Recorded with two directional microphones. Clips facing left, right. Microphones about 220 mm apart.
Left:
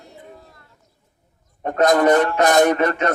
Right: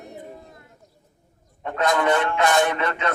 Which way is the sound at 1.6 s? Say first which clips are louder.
Left 6 dB; 40° left (ahead or behind).